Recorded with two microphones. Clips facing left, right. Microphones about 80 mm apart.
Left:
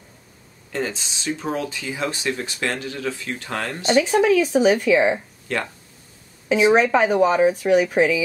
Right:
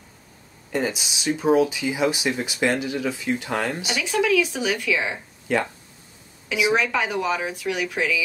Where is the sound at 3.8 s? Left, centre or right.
Left.